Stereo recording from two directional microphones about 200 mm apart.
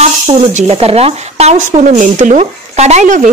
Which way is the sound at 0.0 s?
30° right (ahead or behind).